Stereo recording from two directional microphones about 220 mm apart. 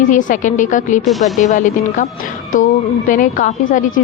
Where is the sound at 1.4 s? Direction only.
35° left (ahead or behind).